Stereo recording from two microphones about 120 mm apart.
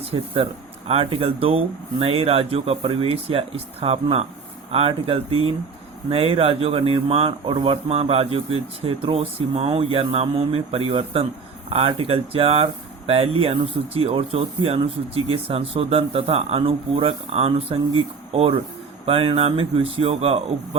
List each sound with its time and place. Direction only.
0.0 s speech: 55° right (ahead or behind)